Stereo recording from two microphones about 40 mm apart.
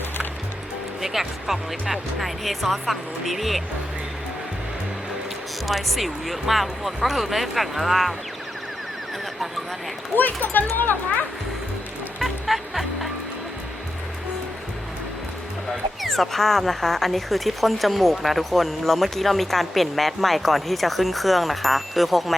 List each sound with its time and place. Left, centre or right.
1.0 s speech: centre
5.6 s speech: centre
10.4 s speech: left
12.2 s music: centre
16.0 s speech: centre